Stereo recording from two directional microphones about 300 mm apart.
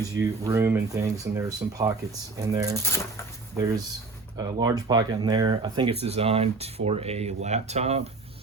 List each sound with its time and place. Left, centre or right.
0.0 s speech: centre
2.8 s speech: centre
4.4 s speech: centre